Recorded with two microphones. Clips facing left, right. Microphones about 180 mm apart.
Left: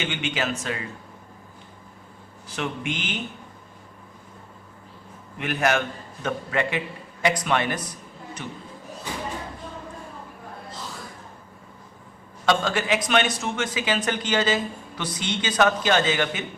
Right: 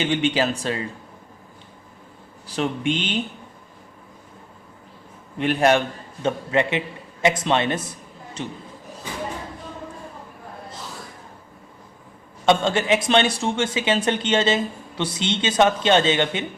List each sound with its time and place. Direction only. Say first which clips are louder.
0.0 s speech: right 7 dB; 35° right (ahead or behind)
2.5 s speech: right 6 dB; 30° right (ahead or behind)
5.4 s a man's voice: right 5 dB; 30° right (ahead or behind)
12.5 s a man's voice: right 4 dB; 25° right (ahead or behind)